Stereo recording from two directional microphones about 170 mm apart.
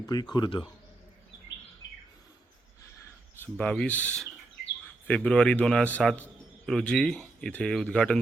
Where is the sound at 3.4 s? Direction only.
5° left (ahead or behind).